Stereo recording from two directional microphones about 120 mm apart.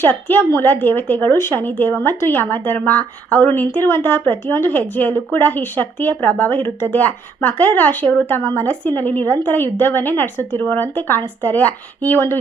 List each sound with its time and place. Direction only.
0.0 s speech: 15° left (ahead or behind)